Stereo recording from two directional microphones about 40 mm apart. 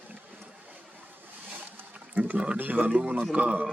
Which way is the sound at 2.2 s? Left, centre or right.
Right.